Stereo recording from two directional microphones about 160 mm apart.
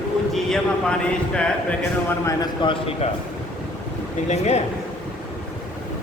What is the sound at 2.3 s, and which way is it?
Speech, 25° left (ahead or behind).